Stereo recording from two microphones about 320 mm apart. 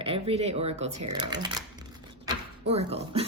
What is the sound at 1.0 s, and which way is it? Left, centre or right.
Speech, right.